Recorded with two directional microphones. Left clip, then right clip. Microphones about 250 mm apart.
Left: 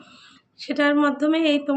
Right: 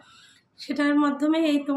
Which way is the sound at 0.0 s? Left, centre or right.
Centre.